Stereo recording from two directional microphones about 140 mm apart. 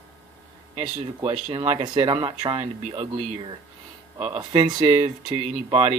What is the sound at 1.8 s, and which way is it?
Speech, 35° right (ahead or behind).